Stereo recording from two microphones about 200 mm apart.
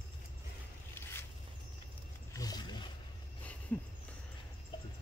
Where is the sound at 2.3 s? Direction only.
20° left (ahead or behind).